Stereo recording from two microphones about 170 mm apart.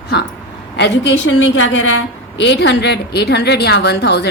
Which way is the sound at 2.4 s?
90° left.